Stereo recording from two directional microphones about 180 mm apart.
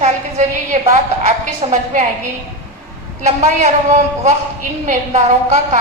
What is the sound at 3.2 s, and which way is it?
A woman's voice, 40° right (ahead or behind).